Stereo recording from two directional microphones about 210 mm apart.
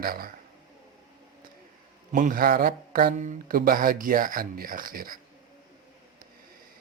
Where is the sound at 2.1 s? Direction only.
40° right (ahead or behind).